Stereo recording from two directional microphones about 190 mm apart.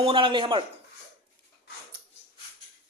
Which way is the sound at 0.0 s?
25° right (ahead or behind).